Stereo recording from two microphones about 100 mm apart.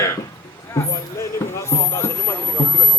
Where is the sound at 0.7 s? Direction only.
30° left (ahead or behind).